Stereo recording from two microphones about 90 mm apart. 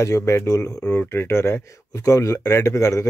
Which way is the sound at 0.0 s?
30° left (ahead or behind).